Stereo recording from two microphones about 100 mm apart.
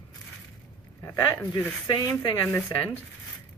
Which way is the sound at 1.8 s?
50° left (ahead or behind).